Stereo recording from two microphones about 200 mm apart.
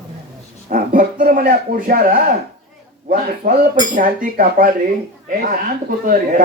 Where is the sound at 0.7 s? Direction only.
40° right (ahead or behind).